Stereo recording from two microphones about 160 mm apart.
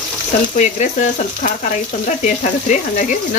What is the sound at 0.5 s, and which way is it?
Speech, 50° left (ahead or behind).